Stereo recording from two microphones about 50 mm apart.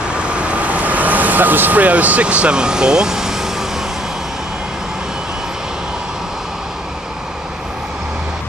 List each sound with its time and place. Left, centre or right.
0.2 s vehicle: right